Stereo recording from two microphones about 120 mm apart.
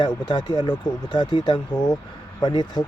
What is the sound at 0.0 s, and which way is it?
Speech, 40° left (ahead or behind).